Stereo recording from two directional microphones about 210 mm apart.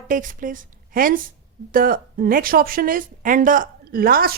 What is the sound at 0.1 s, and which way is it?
A woman's voice, 40° right (ahead or behind).